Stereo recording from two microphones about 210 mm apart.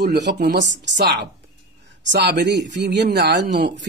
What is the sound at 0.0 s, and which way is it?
Speech, 50° right (ahead or behind).